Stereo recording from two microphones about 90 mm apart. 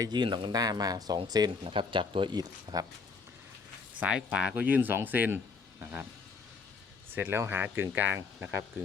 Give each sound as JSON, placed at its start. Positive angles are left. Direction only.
{"t": 0.0, "sound": "speech", "side_deg": -55}
{"t": 0.5, "sound": "speech", "side_deg": -45}
{"t": 1.6, "sound": "speech", "side_deg": -75}
{"t": 4.0, "sound": "speech", "side_deg": -10}
{"t": 7.1, "sound": "speech", "side_deg": -25}